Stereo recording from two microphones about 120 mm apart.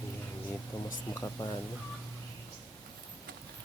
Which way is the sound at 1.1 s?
25° left (ahead or behind).